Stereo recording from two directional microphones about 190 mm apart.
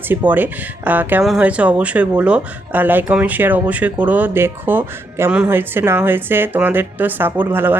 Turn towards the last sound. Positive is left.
turn(degrees=-10)  # may be behind; listen again after turning